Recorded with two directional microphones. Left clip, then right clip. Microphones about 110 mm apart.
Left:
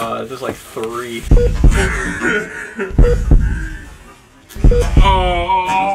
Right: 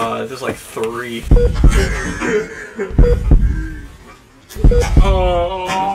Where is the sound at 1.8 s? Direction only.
60° left (ahead or behind).